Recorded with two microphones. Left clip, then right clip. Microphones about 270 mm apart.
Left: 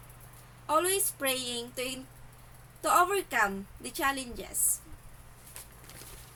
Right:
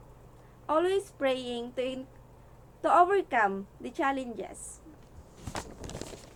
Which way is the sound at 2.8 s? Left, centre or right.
Left.